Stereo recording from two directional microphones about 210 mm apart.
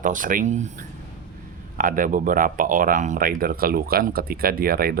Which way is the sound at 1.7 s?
40° right (ahead or behind).